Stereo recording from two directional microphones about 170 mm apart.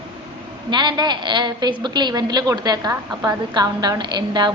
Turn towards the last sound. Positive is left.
turn(degrees=-25)  # may be behind; listen again after turning